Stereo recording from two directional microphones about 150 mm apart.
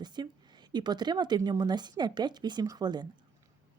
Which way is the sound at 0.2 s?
25° right (ahead or behind).